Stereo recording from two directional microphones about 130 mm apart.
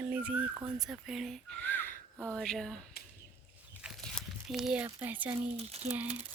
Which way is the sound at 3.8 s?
Centre (ahead or behind).